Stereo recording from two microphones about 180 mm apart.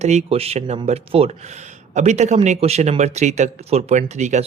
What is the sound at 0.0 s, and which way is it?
Speech, 40° right (ahead or behind).